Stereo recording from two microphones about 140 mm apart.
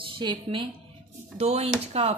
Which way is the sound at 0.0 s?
35° right (ahead or behind).